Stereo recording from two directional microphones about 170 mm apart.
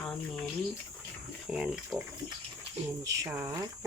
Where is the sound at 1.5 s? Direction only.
5° right (ahead or behind).